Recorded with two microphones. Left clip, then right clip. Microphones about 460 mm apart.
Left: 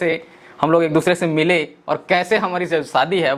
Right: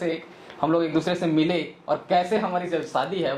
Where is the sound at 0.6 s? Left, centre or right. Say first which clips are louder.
Left 7 dB; left.